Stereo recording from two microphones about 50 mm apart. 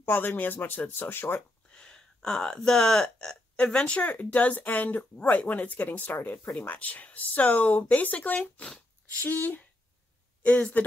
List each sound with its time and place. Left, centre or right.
0.0 s speech: left
1.7 s speech: centre